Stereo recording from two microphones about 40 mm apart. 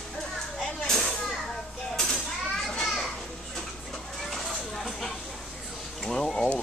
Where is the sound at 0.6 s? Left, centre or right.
Centre.